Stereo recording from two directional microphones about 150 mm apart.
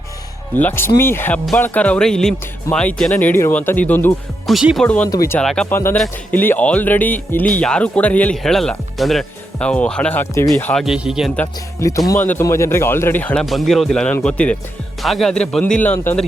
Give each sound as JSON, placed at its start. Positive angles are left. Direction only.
{"t": 0.5, "sound": "speech", "side_deg": 15}
{"t": 4.4, "sound": "speech", "side_deg": 0}
{"t": 5.0, "sound": "speech", "side_deg": 20}
{"t": 5.4, "sound": "speech", "side_deg": 5}
{"t": 5.6, "sound": "speech", "side_deg": 15}
{"t": 10.7, "sound": "speech", "side_deg": 0}
{"t": 11.3, "sound": "speech", "side_deg": 20}
{"t": 13.4, "sound": "speech", "side_deg": 0}